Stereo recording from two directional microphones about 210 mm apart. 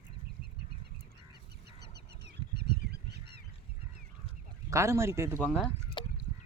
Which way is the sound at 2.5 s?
50° right (ahead or behind).